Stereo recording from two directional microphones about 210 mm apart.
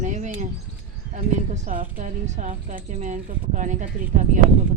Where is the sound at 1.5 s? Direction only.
35° right (ahead or behind).